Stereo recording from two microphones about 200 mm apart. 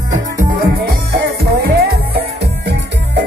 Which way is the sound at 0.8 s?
50° right (ahead or behind).